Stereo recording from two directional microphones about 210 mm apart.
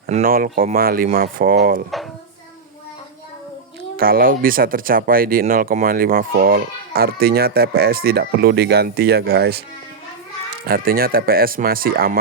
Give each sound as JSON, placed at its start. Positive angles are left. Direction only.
{"t": 0.1, "sound": "speech", "side_deg": -40}
{"t": 3.9, "sound": "speech", "side_deg": -45}
{"t": 10.7, "sound": "speech", "side_deg": -45}